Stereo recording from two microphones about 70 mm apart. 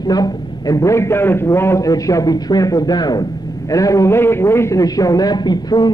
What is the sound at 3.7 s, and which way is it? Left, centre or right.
Speech, left.